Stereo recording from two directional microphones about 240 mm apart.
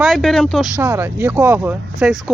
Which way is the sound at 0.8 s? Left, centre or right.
Centre.